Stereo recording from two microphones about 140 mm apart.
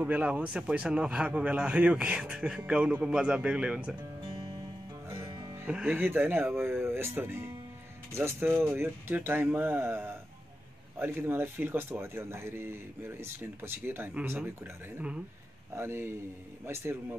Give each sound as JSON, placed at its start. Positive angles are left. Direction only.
{"t": 0.0, "sound": "speech", "side_deg": -10}
{"t": 5.0, "sound": "music", "side_deg": -20}
{"t": 5.7, "sound": "speech", "side_deg": -10}